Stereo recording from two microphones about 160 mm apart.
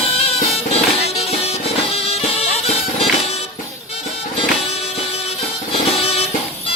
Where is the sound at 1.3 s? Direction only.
40° left (ahead or behind).